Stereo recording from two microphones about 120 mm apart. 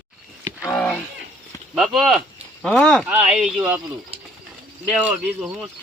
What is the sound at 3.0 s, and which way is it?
Speech, 10° right (ahead or behind).